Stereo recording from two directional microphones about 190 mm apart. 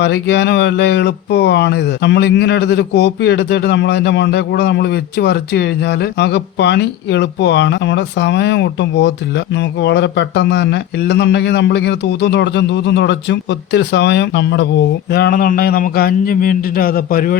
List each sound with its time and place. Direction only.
0.0 s speech: 65° left (ahead or behind)
15.1 s a man's voice: 50° left (ahead or behind)